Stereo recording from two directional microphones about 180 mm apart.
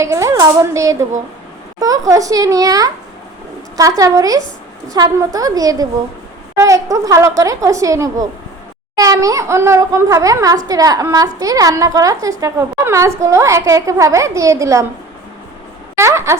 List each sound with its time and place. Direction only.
0.0 s a child's voice: 15° right (ahead or behind)
16.0 s a child's voice: 15° right (ahead or behind)